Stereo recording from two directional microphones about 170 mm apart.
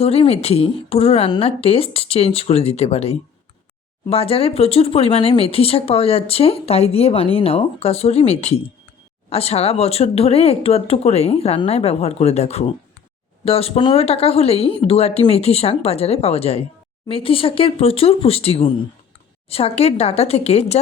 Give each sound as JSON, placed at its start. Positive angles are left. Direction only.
{"t": 0.0, "sound": "speech", "side_deg": 35}